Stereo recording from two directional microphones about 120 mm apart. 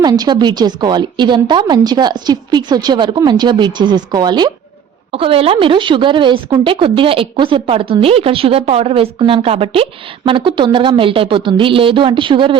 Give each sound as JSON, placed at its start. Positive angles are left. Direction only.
{"t": 0.0, "sound": "a woman's voice", "side_deg": -35}
{"t": 5.1, "sound": "a woman's voice", "side_deg": -50}